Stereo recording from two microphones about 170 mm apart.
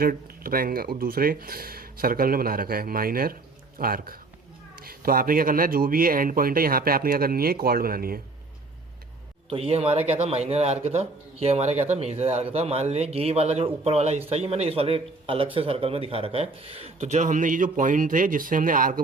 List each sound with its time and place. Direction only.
0.0 s speech: 60° right (ahead or behind)
9.5 s speech: 35° right (ahead or behind); by 19.0 s 55° right (ahead or behind)